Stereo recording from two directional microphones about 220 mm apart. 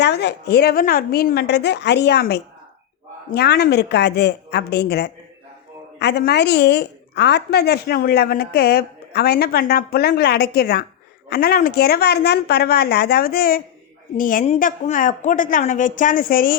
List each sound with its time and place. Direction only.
0.0 s a woman's voice: 50° left (ahead or behind)